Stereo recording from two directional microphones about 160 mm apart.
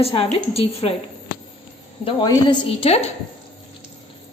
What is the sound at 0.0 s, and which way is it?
Speech, 35° left (ahead or behind).